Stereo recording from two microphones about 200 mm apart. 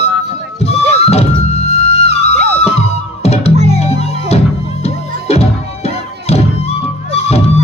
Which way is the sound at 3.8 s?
30° left (ahead or behind).